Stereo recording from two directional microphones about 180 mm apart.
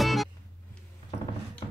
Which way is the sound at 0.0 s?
Centre (ahead or behind).